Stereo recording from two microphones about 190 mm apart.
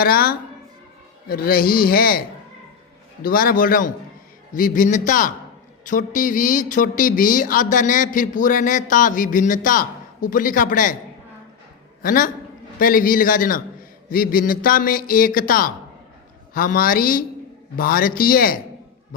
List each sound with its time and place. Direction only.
0.0 s speech: 50° left (ahead or behind)
3.2 s speech: 50° left (ahead or behind)
12.0 s speech: 45° left (ahead or behind)